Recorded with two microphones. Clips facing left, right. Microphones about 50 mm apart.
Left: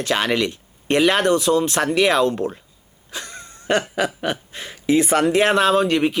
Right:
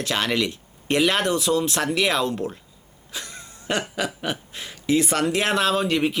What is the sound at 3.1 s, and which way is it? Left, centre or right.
Cough, centre.